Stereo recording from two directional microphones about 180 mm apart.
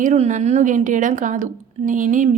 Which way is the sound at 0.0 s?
40° right (ahead or behind).